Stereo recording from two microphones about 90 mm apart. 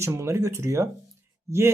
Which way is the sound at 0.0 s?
30° right (ahead or behind).